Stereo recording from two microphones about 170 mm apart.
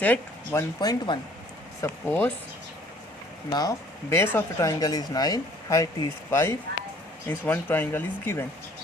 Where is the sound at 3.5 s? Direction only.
20° left (ahead or behind).